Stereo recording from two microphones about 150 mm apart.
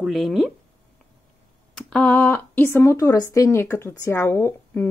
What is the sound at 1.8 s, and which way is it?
Speech, 5° left (ahead or behind).